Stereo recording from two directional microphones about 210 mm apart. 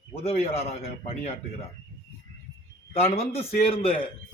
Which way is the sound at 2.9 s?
30° left (ahead or behind).